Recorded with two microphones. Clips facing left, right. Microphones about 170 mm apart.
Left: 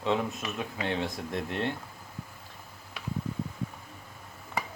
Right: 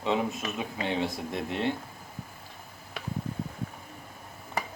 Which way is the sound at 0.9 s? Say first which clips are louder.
Right 2 dB; 5° right (ahead or behind).